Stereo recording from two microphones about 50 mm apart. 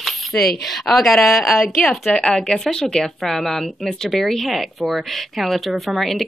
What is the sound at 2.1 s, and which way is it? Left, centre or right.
Speech, centre.